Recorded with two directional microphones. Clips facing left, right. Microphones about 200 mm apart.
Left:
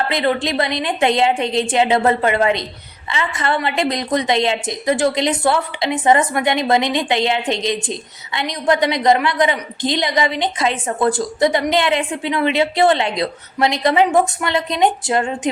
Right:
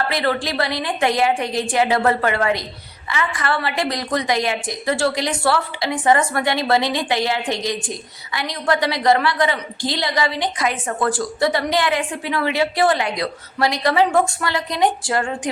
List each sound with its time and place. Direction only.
0.1 s a woman's voice: 20° left (ahead or behind)